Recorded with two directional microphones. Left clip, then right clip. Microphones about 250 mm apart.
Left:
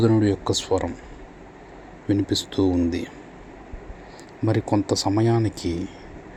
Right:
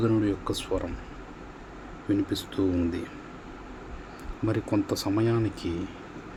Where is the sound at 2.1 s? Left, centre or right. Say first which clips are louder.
Left 5 dB; centre.